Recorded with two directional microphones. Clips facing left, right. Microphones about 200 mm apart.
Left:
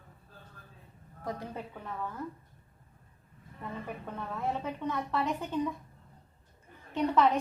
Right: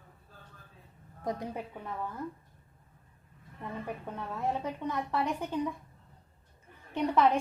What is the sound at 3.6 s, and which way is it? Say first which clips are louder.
A woman's voice: right 1 dB; 10° right (ahead or behind).